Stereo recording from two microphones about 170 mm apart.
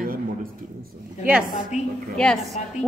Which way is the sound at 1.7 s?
40° left (ahead or behind).